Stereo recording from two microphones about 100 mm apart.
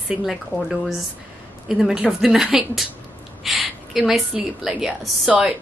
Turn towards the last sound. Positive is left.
turn(degrees=-5)  # may be behind; listen again after turning